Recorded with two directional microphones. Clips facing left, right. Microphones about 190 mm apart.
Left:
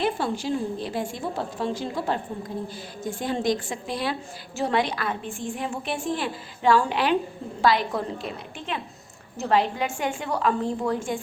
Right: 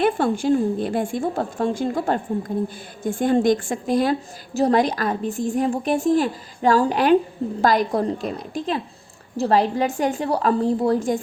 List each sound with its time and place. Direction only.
0.0 s a woman's voice: 50° right (ahead or behind); by 11.2 s 35° right (ahead or behind)